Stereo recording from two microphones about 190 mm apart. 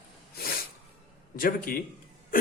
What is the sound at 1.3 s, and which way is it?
Speech, 50° left (ahead or behind).